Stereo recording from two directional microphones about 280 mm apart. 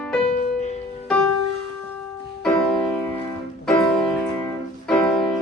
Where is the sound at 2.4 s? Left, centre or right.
Centre.